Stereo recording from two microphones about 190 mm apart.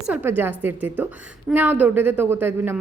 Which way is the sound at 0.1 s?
10° right (ahead or behind).